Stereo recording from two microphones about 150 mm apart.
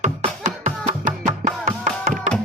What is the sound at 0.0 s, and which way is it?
Music, 50° right (ahead or behind).